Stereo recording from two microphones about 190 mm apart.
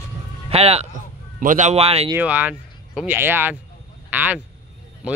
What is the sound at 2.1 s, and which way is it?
A man's voice, 10° right (ahead or behind).